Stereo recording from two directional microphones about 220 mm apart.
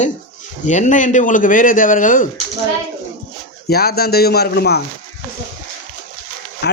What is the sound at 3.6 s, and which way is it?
Speech, 45° left (ahead or behind).